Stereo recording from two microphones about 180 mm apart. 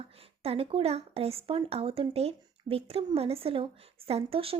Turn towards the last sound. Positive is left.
turn(degrees=-30)  # may be behind; listen again after turning